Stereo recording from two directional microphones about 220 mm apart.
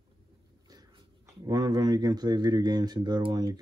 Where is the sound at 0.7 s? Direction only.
15° right (ahead or behind).